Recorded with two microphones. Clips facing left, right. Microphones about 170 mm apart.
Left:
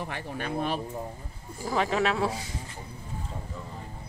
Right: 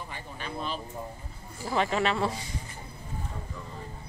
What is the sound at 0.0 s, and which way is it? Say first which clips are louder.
Speech: left 6 dB; 65° left (ahead or behind).